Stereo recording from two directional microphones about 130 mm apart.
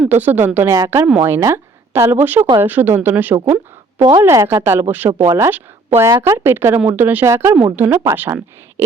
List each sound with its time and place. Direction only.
0.0 s speech: 15° right (ahead or behind)